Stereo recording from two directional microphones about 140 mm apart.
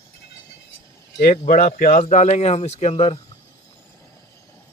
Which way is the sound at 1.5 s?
75° left (ahead or behind).